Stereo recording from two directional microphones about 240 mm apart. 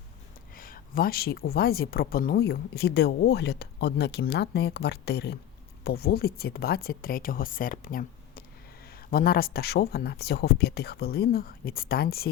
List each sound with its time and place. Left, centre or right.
0.5 s speech: left